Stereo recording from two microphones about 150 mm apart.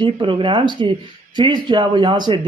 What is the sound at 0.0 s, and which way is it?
Speech, 35° right (ahead or behind).